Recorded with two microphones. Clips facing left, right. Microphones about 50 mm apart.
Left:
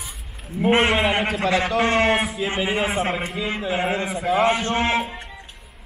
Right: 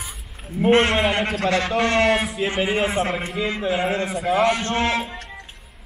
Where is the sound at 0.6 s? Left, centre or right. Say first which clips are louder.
Right 1 dB; centre.